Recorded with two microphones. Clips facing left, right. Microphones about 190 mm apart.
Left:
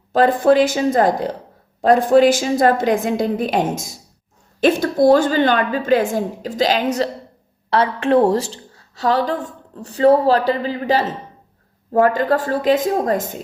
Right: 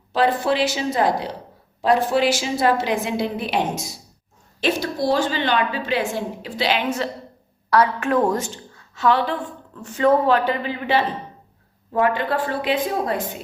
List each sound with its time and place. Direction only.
0.1 s a woman's voice: 50° left (ahead or behind)
7.7 s a woman's voice: 30° left (ahead or behind); by 13.4 s 45° left (ahead or behind)